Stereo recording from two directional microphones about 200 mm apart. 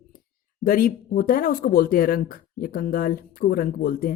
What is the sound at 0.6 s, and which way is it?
Speech, 45° left (ahead or behind).